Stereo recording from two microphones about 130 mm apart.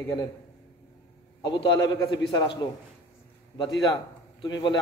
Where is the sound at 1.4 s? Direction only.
35° left (ahead or behind).